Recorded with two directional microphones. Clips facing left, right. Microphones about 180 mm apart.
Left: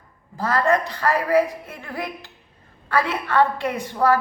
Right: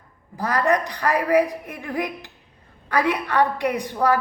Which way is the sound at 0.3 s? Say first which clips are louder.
Left 1 dB; 15° right (ahead or behind).